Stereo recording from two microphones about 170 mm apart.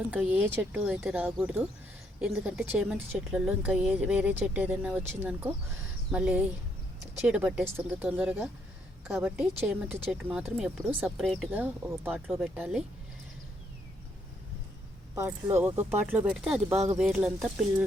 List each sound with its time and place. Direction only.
0.1 s a woman's voice: 10° right (ahead or behind)
11.5 s a woman's voice: 10° right (ahead or behind)
15.1 s a woman's voice: 15° right (ahead or behind)
16.7 s speech: 40° right (ahead or behind)
17.0 s speech: 5° right (ahead or behind)